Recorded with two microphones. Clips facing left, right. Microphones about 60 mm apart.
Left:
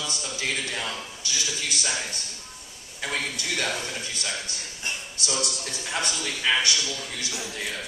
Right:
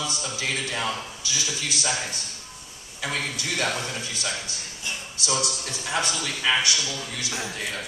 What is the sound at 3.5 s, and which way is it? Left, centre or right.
Speech, right.